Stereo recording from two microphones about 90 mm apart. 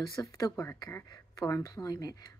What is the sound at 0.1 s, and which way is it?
Speech, 40° left (ahead or behind).